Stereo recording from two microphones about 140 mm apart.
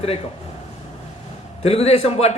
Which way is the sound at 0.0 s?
45° left (ahead or behind).